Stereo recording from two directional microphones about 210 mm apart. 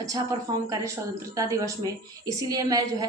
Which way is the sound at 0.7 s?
15° right (ahead or behind).